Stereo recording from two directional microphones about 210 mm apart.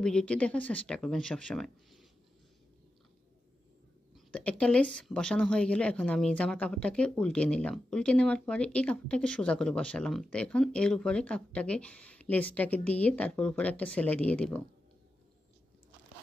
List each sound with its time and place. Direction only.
0.0 s speech: 5° left (ahead or behind)
4.1 s speech: 5° left (ahead or behind)